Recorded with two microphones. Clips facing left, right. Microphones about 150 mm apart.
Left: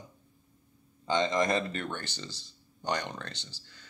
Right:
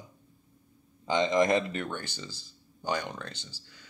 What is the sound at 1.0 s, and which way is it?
Speech, 20° right (ahead or behind).